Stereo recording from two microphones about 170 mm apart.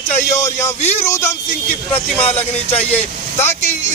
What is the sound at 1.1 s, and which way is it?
Speech, 15° left (ahead or behind).